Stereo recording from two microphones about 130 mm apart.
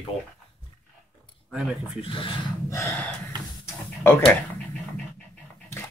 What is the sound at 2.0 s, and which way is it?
Speech, 40° left (ahead or behind).